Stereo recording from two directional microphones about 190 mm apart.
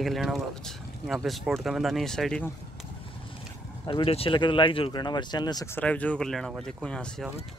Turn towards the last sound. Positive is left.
turn(degrees=5)  # may be behind; listen again after turning